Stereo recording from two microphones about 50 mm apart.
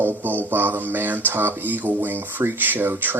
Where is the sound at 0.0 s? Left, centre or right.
Right.